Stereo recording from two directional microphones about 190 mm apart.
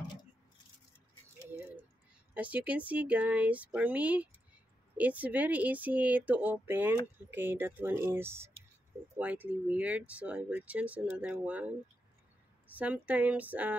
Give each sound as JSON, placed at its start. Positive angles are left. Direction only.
{"t": 2.3, "sound": "speech", "side_deg": -5}
{"t": 12.7, "sound": "speech", "side_deg": -10}